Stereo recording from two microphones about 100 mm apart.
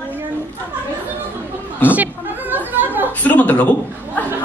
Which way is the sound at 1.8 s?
15° right (ahead or behind).